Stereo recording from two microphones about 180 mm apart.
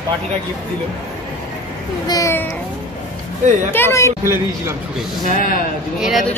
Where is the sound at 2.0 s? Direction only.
20° left (ahead or behind).